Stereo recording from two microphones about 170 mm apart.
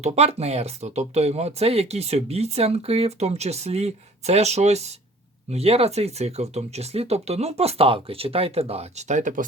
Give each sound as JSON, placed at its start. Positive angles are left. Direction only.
{"t": 0.0, "sound": "speech", "side_deg": -40}